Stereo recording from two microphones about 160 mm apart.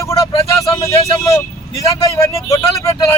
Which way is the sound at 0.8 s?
25° left (ahead or behind).